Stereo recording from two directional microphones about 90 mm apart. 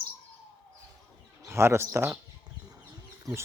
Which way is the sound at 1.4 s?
30° right (ahead or behind).